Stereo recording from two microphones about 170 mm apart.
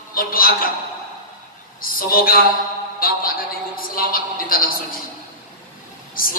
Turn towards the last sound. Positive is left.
turn(degrees=55)  # may be behind; listen again after turning